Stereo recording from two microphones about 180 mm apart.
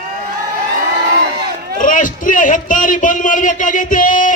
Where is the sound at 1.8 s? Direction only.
45° left (ahead or behind).